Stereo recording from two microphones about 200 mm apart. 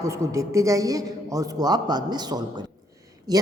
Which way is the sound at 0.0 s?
15° right (ahead or behind).